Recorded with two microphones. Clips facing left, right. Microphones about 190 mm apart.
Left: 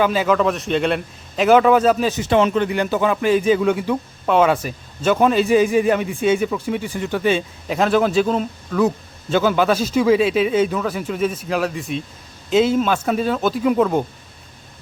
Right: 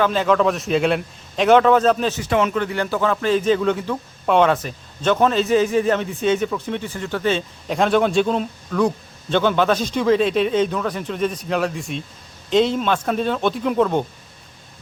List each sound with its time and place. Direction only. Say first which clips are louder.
0.0 s a man's voice: even; 5° left (ahead or behind)
2.1 s a man's voice: left 3 dB; 25° left (ahead or behind); by 14.0 s 5° left (ahead or behind)